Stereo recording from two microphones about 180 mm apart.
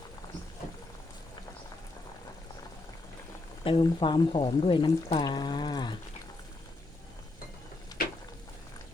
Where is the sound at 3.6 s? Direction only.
30° left (ahead or behind).